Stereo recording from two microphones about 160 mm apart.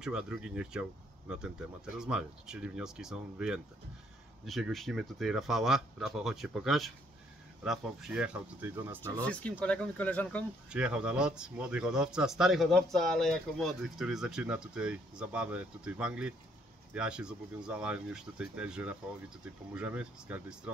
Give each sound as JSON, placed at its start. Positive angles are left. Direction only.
{"t": 0.0, "sound": "speech", "side_deg": -5}
{"t": 2.0, "sound": "speech", "side_deg": -5}
{"t": 9.2, "sound": "speech", "side_deg": 10}
{"t": 10.7, "sound": "speech", "side_deg": -5}